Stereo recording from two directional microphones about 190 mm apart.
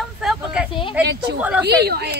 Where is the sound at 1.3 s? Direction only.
65° right (ahead or behind).